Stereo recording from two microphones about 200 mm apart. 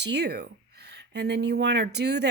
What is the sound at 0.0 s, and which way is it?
Speech, 55° right (ahead or behind).